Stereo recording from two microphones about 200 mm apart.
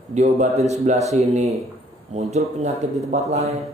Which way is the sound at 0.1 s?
35° right (ahead or behind).